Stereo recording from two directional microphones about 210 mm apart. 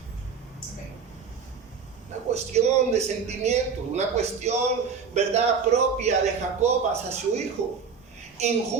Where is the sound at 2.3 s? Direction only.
30° right (ahead or behind).